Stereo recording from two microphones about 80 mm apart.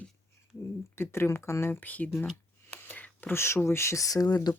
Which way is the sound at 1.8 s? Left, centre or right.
Left.